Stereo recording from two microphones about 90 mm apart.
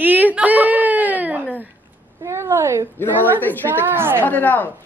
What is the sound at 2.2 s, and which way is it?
Speech, 30° right (ahead or behind).